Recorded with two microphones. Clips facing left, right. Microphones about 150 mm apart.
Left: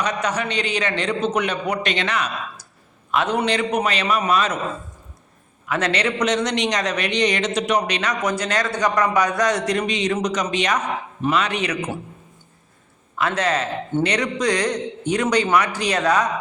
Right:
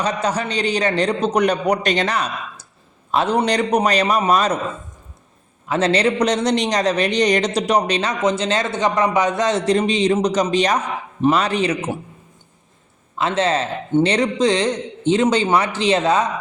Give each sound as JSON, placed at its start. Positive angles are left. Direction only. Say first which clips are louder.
{"t": 0.0, "sound": "a man's voice", "louder": "right 2 dB", "side_deg": -30}
{"t": 5.6, "sound": "a man's voice", "louder": "right 5 dB", "side_deg": -30}
{"t": 13.1, "sound": "a man's voice", "louder": "right 3 dB", "side_deg": -25}